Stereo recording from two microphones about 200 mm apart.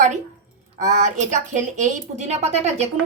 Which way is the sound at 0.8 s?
40° right (ahead or behind).